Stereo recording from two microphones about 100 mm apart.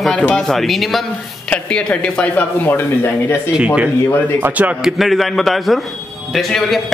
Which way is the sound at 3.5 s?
10° right (ahead or behind).